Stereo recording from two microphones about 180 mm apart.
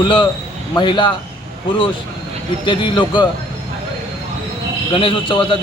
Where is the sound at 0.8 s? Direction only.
25° left (ahead or behind).